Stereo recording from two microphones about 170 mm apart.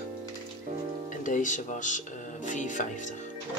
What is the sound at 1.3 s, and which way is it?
Speech, 50° left (ahead or behind).